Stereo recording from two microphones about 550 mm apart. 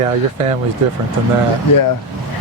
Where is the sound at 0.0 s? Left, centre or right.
Right.